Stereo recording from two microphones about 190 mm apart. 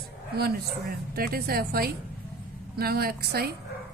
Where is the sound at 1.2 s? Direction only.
50° right (ahead or behind).